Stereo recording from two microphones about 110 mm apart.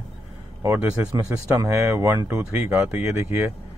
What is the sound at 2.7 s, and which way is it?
Speech, 15° right (ahead or behind).